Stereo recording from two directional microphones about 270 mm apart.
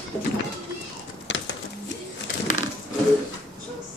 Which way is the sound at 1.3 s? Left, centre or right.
Left.